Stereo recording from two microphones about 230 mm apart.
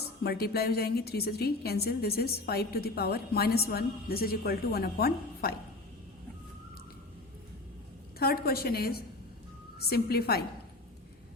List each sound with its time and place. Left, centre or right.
0.0 s a woman's voice: left
8.2 s a woman's voice: left